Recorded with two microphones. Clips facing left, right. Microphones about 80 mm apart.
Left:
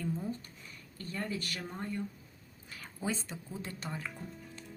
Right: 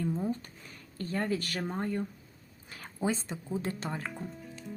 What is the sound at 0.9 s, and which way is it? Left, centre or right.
Speech, right.